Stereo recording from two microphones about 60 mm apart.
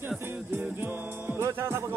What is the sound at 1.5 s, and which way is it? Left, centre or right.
Speech, right.